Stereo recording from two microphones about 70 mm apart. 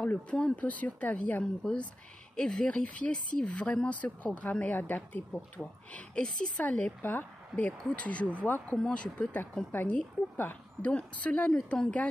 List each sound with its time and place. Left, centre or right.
0.0 s a woman's voice: centre